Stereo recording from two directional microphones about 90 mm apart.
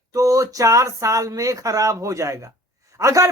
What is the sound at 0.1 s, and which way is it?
Speech, 40° right (ahead or behind).